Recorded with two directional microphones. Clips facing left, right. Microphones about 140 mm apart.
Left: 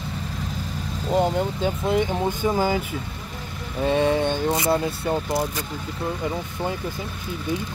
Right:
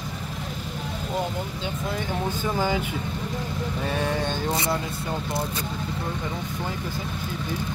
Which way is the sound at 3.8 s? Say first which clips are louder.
Left 8 dB; 20° left (ahead or behind).